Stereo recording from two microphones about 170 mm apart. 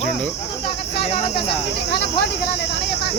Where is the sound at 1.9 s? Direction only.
70° left (ahead or behind).